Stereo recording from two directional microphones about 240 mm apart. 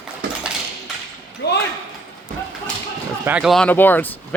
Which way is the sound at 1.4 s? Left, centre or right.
Left.